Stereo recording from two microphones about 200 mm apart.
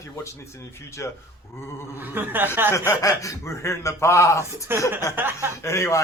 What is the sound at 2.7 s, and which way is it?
Speech, 15° left (ahead or behind).